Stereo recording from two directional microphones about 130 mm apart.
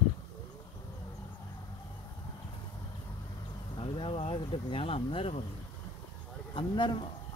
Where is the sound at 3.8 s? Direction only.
45° left (ahead or behind).